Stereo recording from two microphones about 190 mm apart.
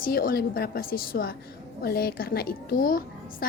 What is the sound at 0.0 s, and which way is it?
A woman's voice, 50° left (ahead or behind).